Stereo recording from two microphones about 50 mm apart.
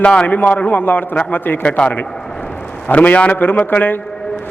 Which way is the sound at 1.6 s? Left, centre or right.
Left.